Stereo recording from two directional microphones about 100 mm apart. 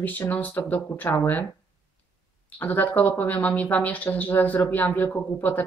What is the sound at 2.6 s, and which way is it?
A woman's voice, 20° left (ahead or behind).